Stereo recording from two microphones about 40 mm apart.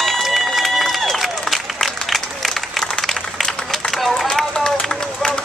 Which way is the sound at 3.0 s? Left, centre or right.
Centre.